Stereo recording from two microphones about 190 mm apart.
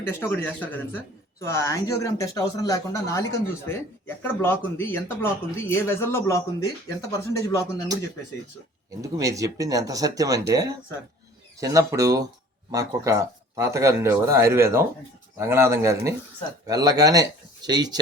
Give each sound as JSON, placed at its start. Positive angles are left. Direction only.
{"t": 0.1, "sound": "speech", "side_deg": 15}
{"t": 9.0, "sound": "speech", "side_deg": -15}